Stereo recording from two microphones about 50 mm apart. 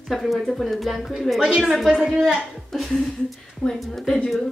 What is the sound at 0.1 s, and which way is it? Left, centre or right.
A woman's voice, centre.